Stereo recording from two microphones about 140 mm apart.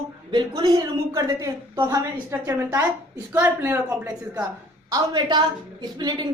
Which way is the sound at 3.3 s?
15° right (ahead or behind).